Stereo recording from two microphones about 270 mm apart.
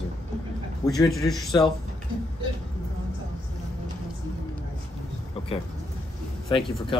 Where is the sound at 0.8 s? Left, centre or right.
Centre.